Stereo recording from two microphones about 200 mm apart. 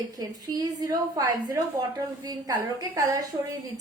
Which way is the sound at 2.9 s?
15° right (ahead or behind).